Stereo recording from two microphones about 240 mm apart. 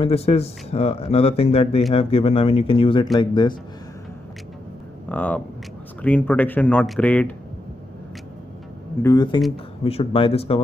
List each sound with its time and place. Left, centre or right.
0.0 s speech: left
5.1 s speech: centre
9.0 s speech: centre